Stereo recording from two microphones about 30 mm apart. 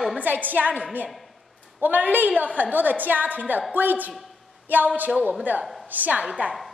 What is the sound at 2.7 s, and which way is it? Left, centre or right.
A woman's voice, right.